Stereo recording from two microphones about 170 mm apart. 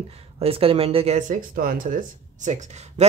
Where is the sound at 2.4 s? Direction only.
45° right (ahead or behind).